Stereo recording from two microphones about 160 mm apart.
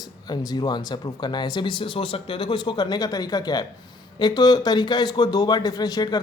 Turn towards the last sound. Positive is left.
turn(degrees=25)  # may be behind; listen again after turning